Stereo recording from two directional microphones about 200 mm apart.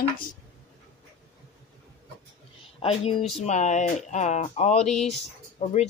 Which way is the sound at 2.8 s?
30° left (ahead or behind).